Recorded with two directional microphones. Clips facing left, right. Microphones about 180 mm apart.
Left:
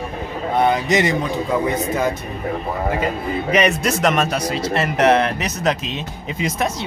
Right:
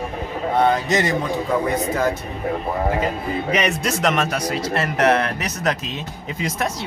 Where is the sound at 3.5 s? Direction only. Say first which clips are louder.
Left 6 dB; 45° left (ahead or behind).